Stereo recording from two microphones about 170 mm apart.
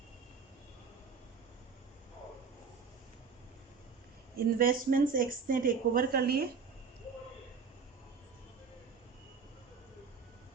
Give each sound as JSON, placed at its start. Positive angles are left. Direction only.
{"t": 4.4, "sound": "speech", "side_deg": -55}